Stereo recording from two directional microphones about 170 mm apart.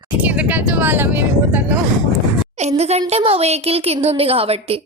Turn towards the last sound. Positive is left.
turn(degrees=-35)  # may be behind; listen again after turning